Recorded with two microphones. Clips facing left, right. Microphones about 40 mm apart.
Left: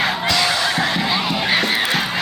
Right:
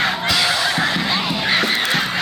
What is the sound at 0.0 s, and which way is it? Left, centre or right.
Honk, centre.